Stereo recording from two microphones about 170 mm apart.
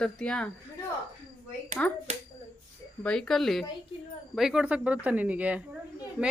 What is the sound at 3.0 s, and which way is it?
Speech, centre (ahead or behind).